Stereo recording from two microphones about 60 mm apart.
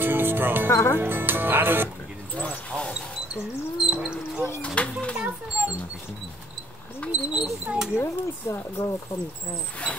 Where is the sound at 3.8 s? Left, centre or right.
Centre.